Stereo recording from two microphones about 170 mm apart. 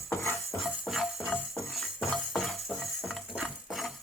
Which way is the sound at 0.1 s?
15° left (ahead or behind).